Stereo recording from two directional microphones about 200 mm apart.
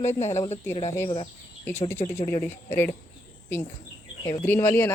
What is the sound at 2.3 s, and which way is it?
Speech, 10° left (ahead or behind).